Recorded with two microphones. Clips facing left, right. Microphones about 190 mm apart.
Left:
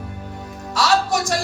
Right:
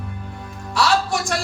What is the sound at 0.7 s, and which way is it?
Music, 40° left (ahead or behind).